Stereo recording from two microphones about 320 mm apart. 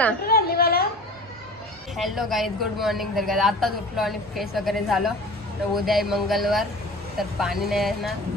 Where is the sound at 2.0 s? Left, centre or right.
Centre.